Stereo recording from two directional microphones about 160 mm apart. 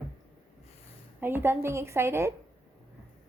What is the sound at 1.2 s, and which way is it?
A woman's voice, 15° right (ahead or behind).